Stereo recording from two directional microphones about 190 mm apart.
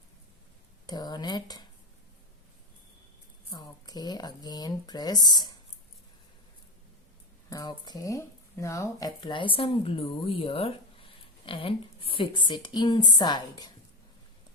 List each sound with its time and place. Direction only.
0.9 s speech: 20° left (ahead or behind)
3.5 s speech: 20° left (ahead or behind)
7.5 s speech: 20° left (ahead or behind)